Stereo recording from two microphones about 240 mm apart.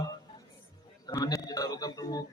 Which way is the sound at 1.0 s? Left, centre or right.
Centre.